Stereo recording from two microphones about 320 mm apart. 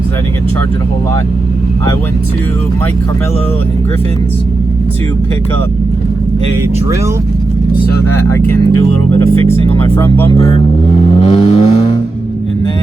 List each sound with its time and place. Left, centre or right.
8.1 s speech: centre
9.5 s speech: centre
11.1 s vehicle: centre